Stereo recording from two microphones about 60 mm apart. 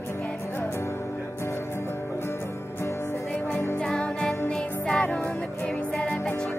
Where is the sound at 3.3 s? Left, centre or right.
Left.